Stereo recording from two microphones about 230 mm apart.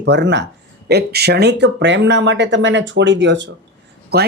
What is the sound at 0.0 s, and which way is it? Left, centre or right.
Speech, right.